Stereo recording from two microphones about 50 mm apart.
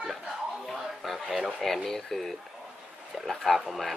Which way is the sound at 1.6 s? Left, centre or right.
Centre.